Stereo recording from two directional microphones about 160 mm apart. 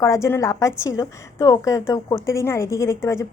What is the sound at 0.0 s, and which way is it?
A woman's voice, 20° left (ahead or behind).